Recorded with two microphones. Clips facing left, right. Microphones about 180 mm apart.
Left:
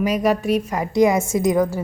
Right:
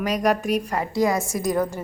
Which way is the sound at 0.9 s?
20° left (ahead or behind).